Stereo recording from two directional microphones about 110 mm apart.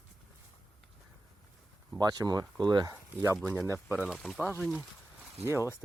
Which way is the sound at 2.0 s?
35° right (ahead or behind).